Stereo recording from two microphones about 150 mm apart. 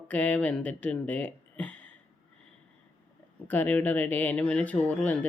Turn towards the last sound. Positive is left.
turn(degrees=10)  # may be behind; listen again after turning